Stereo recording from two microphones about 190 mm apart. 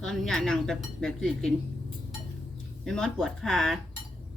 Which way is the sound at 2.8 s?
5° left (ahead or behind).